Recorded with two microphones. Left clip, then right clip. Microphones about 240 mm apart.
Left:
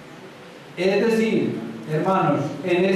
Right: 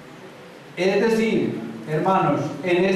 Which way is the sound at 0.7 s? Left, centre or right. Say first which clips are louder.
Even; centre.